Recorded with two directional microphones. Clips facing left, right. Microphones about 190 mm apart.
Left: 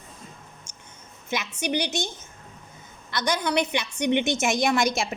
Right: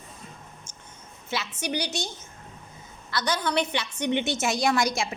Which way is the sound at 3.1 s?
15° left (ahead or behind).